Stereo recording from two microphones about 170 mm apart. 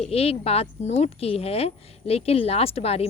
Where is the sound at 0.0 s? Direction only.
35° left (ahead or behind).